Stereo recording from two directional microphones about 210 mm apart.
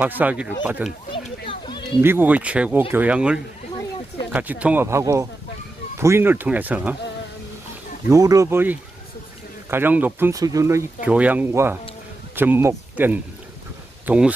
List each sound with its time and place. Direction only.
0.0 s speech: 5° right (ahead or behind)
1.1 s children playing: 25° left (ahead or behind)
2.0 s speech: 10° right (ahead or behind)
8.1 s speech: 15° right (ahead or behind)